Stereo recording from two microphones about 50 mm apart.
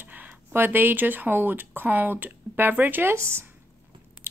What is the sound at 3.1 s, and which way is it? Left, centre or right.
Speech, right.